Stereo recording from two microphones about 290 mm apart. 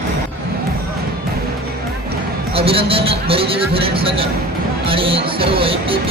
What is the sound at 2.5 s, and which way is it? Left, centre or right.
Speech, centre.